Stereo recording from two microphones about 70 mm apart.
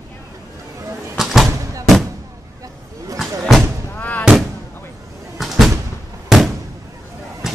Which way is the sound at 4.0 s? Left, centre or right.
Left.